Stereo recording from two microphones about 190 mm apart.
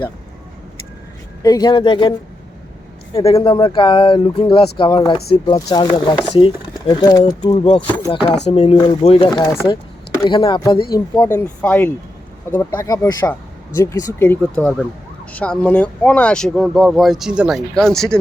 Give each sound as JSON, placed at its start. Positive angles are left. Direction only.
{"t": 1.4, "sound": "speech", "side_deg": 20}
{"t": 3.3, "sound": "speech", "side_deg": 25}
{"t": 7.9, "sound": "speech", "side_deg": 10}
{"t": 8.1, "sound": "speech", "side_deg": 30}
{"t": 9.4, "sound": "speech", "side_deg": 15}